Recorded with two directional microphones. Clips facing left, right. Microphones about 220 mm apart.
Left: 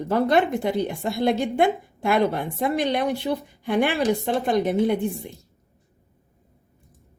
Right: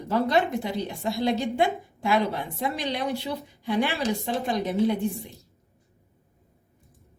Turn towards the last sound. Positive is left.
turn(degrees=55)  # may be behind; listen again after turning